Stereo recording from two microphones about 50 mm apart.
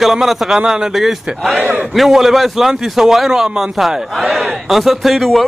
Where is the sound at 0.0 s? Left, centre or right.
Centre.